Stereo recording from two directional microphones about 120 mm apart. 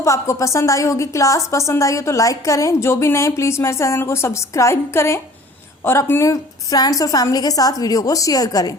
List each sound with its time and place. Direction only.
0.0 s a woman's voice: 25° left (ahead or behind)